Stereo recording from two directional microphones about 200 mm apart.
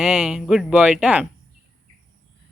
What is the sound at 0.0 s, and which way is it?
Speech, centre (ahead or behind).